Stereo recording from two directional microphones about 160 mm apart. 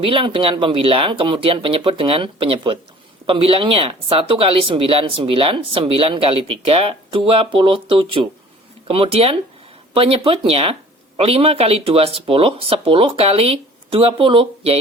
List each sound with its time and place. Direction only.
0.0 s speech: 35° right (ahead or behind)